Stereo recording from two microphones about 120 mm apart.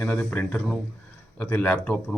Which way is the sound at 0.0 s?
10° left (ahead or behind).